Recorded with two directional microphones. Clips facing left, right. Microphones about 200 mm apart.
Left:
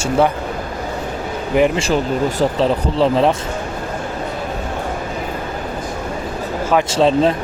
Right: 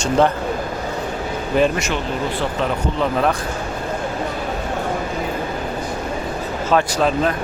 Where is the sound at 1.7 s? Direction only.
30° left (ahead or behind).